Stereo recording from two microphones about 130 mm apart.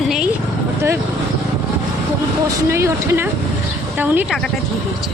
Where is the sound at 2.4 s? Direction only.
20° right (ahead or behind).